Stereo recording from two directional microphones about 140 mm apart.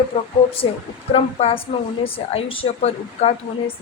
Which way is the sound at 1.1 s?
45° left (ahead or behind).